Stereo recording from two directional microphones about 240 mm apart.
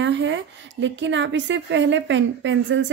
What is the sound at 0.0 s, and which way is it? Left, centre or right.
A woman's voice, right.